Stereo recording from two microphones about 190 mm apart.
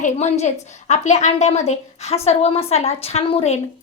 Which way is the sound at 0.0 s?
35° left (ahead or behind).